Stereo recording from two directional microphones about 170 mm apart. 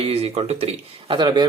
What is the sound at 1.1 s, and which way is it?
Speech, 25° right (ahead or behind).